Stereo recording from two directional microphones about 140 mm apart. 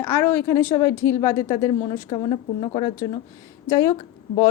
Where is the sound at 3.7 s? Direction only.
25° left (ahead or behind).